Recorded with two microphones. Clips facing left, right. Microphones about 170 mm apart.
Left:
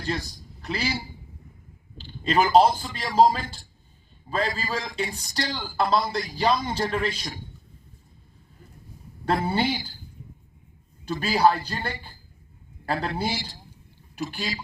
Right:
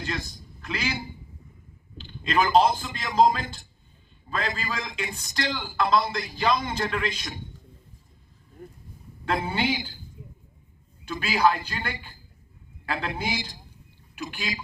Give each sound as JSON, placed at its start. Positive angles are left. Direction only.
{"t": 0.0, "sound": "a man's voice", "side_deg": 40}
{"t": 2.0, "sound": "speech", "side_deg": 35}
{"t": 4.3, "sound": "speech", "side_deg": 35}
{"t": 8.6, "sound": "a sound", "side_deg": -55}
{"t": 9.2, "sound": "speech", "side_deg": 40}
{"t": 11.0, "sound": "a man's voice", "side_deg": 40}
{"t": 12.8, "sound": "a sound", "side_deg": 40}
{"t": 13.3, "sound": "speech", "side_deg": -15}
{"t": 14.2, "sound": "speech", "side_deg": 40}